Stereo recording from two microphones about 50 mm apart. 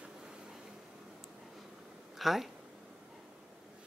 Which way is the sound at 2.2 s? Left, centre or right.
Centre.